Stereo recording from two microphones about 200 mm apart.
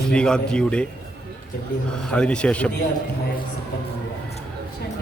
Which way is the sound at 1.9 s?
5° left (ahead or behind).